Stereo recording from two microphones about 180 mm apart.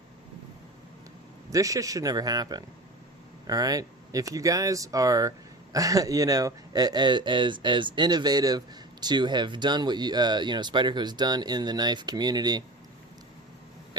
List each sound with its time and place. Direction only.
1.5 s speech: 20° right (ahead or behind)